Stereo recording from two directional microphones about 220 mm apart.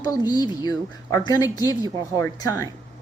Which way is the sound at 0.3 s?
20° left (ahead or behind).